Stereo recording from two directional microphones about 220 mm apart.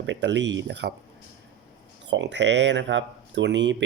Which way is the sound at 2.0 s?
55° right (ahead or behind).